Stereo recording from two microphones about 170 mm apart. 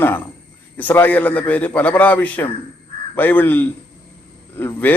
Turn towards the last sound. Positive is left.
turn(degrees=10)  # may be behind; listen again after turning